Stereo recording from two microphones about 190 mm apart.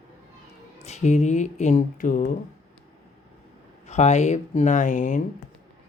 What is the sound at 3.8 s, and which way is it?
Speech, 35° left (ahead or behind).